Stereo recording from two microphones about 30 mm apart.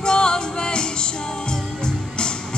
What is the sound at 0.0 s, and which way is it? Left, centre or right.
Music, left.